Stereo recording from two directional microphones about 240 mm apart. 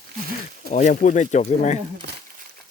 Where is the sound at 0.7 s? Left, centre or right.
Left.